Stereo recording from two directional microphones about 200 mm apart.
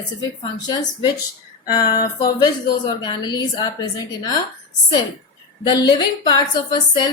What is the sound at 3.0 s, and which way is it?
A woman's voice, 20° left (ahead or behind).